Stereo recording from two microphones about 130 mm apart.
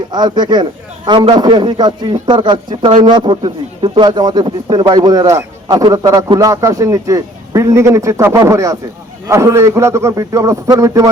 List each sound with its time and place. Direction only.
0.1 s a man's voice: 35° right (ahead or behind)